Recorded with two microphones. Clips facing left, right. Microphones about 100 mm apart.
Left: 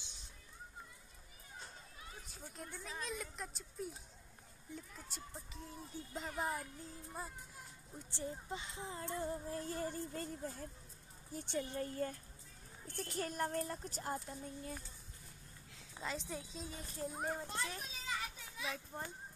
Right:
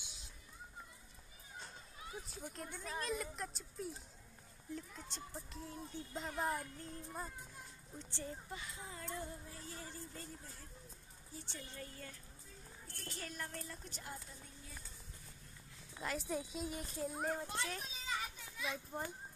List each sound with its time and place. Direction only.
2.4 s a woman's voice: 15° right (ahead or behind)
2.8 s a child's voice: centre (ahead or behind)
8.0 s speech: 15° left (ahead or behind); by 9.6 s 35° left (ahead or behind)
9.6 s speech: 50° left (ahead or behind)
11.8 s a child's voice: 40° left (ahead or behind)
16.0 s a child's voice: 5° right (ahead or behind)